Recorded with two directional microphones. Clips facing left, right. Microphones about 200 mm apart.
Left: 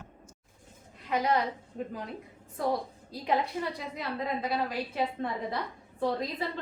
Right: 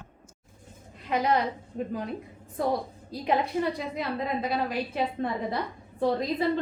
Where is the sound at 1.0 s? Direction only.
25° right (ahead or behind).